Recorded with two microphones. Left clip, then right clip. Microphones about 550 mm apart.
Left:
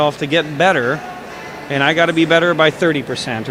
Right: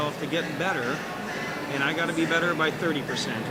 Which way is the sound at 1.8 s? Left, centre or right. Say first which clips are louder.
Left 13 dB; left.